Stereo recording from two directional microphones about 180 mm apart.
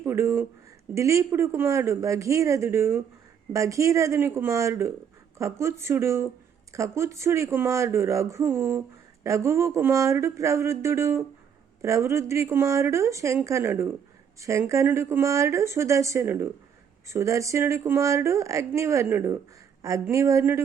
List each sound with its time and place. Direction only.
0.0 s speech: 15° right (ahead or behind)